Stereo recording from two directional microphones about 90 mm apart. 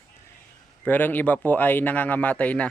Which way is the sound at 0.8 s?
20° left (ahead or behind).